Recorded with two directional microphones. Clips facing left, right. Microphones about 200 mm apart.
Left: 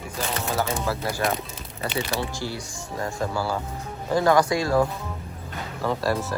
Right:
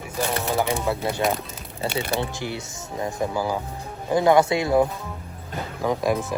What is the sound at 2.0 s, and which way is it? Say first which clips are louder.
Speech: right 1 dB; 55° right (ahead or behind).